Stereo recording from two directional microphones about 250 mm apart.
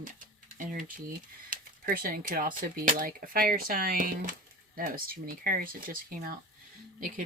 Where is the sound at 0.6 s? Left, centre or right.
Right.